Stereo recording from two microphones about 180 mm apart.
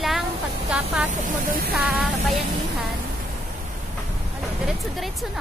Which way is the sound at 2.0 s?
Centre (ahead or behind).